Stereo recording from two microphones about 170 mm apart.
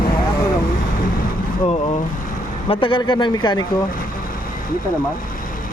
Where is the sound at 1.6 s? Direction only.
35° left (ahead or behind).